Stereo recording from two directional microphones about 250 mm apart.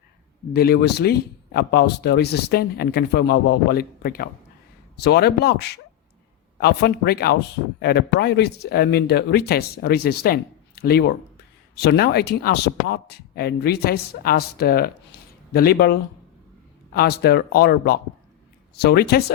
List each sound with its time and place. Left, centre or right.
0.5 s speech: left